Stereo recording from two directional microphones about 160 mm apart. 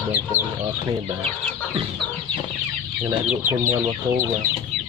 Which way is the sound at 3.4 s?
55° right (ahead or behind).